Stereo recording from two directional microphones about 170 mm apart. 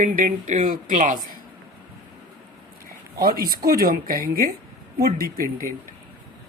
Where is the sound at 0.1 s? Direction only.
50° right (ahead or behind).